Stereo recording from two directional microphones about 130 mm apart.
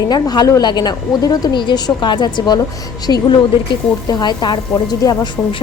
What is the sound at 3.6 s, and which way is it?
A woman's voice, 35° left (ahead or behind).